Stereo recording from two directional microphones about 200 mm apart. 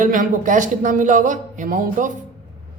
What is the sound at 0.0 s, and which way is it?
A man's voice, 40° right (ahead or behind).